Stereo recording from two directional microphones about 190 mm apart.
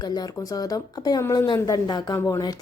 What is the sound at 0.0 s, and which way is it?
Speech, 20° left (ahead or behind).